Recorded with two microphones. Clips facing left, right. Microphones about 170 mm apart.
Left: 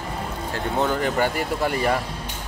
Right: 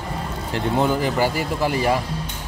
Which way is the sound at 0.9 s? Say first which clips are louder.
Right 2 dB; 5° right (ahead or behind).